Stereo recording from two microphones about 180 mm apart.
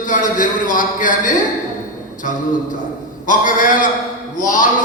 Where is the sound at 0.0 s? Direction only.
45° left (ahead or behind).